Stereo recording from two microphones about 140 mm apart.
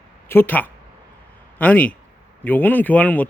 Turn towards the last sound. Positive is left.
turn(degrees=10)  # may be behind; listen again after turning